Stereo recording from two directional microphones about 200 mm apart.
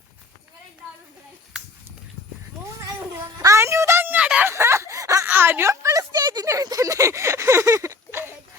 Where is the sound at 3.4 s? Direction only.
15° right (ahead or behind).